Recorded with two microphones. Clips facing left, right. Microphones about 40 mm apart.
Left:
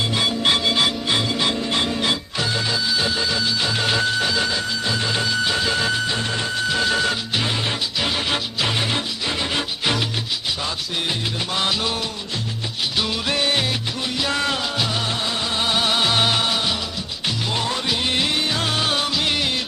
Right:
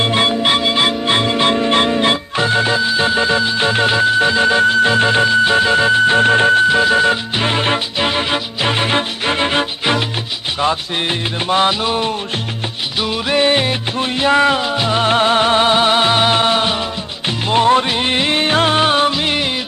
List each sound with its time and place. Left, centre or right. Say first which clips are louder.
0.0 s music: right 7 dB; right
0.4 s music: right 4 dB; right
6.7 s music: right 8 dB; right
7.4 s music: right 7 dB; right
11.8 s music: right 7 dB; right
16.3 s music: right 7 dB; right